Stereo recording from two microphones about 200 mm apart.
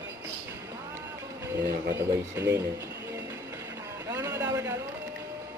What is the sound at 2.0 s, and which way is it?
Speech, 15° right (ahead or behind).